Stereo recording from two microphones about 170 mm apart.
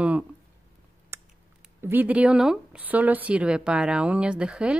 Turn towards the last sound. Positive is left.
turn(degrees=-5)  # may be behind; listen again after turning